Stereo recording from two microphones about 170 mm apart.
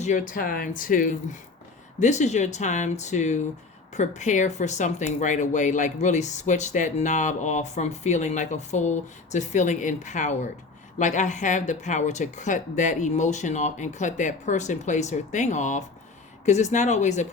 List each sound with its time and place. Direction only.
0.0 s speech: 50° left (ahead or behind)